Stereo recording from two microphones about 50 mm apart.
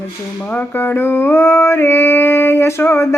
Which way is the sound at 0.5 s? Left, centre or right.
Left.